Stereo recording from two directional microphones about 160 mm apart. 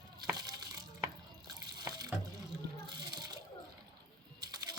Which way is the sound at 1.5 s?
25° right (ahead or behind).